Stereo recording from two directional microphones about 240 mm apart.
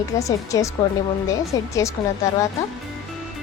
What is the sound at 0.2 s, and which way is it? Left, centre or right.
A woman's voice, centre.